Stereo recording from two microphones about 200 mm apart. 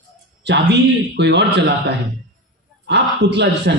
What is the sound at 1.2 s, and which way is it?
Speech, 60° right (ahead or behind).